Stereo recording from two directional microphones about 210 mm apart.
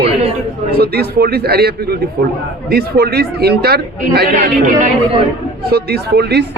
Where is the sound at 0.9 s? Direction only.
50° right (ahead or behind).